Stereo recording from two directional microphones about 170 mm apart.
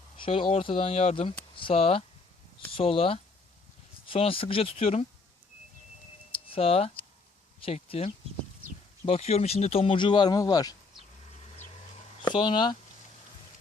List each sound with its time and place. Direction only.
0.3 s speech: 30° left (ahead or behind)
6.5 s speech: 35° left (ahead or behind)
12.2 s speech: 25° left (ahead or behind)